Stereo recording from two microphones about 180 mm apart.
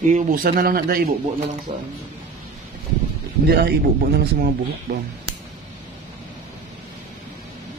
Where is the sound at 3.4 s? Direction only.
60° right (ahead or behind).